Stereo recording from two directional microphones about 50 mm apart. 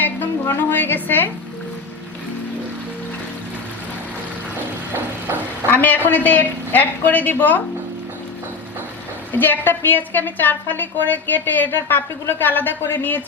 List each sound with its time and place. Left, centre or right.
0.4 s a woman's voice: left
5.7 s a woman's voice: left
9.3 s a woman's voice: left
12.8 s speech: left